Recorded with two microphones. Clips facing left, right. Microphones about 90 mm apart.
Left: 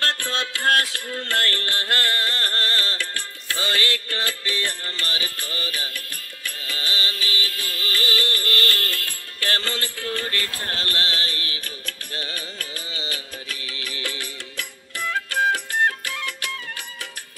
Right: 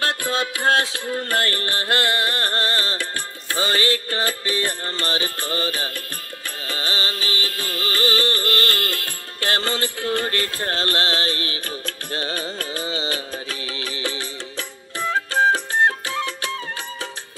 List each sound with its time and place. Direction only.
0.0 s music: 10° right (ahead or behind)
4.8 s music: 30° right (ahead or behind)
14.0 s music: 20° right (ahead or behind)